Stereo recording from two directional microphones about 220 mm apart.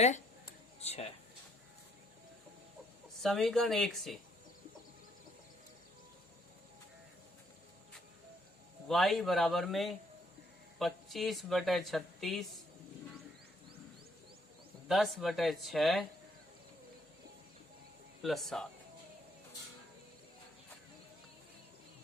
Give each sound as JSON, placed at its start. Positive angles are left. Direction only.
{"t": 0.4, "sound": "a sound", "side_deg": 30}
{"t": 3.2, "sound": "speech", "side_deg": 0}
{"t": 8.9, "sound": "speech", "side_deg": 0}
{"t": 14.8, "sound": "speech", "side_deg": 0}
{"t": 18.2, "sound": "speech", "side_deg": 0}